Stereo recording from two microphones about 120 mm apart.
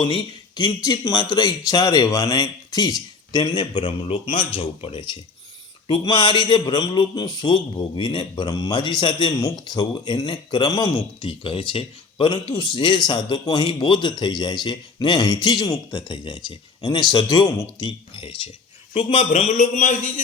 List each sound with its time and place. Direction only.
0.0 s a man's voice: 45° left (ahead or behind)
11.3 s speech: 50° left (ahead or behind)
13.7 s speech: 45° left (ahead or behind)
19.3 s a man's voice: 75° left (ahead or behind); by 20.2 s 90° left